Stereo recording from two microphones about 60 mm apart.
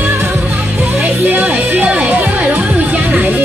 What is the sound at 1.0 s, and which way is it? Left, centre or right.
Speech, right.